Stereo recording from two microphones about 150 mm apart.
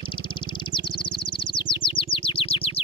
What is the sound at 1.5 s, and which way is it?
Chirp, 35° left (ahead or behind).